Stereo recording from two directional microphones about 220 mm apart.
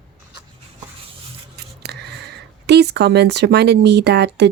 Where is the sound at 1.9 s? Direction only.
45° right (ahead or behind).